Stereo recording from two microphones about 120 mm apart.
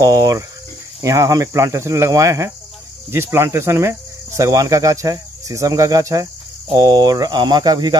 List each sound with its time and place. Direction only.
0.0 s cricket: 30° right (ahead or behind)
6.7 s speech: 35° right (ahead or behind)